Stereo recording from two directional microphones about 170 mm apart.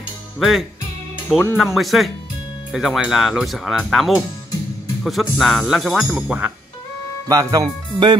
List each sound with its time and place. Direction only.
0.4 s speech: centre (ahead or behind)
7.2 s speech: 20° right (ahead or behind)